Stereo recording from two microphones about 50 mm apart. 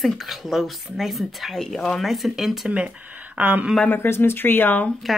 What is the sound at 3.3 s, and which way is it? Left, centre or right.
Speech, right.